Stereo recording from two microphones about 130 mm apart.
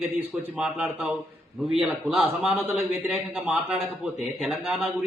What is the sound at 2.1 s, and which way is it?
Speech, 5° right (ahead or behind).